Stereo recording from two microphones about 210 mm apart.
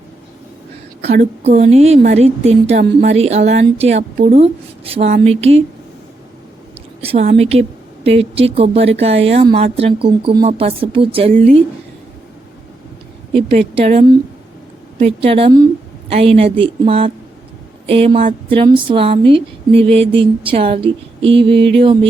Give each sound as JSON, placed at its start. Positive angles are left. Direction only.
{"t": 1.0, "sound": "a woman's voice", "side_deg": -40}
{"t": 7.0, "sound": "a woman's voice", "side_deg": -30}
{"t": 13.3, "sound": "a woman's voice", "side_deg": -25}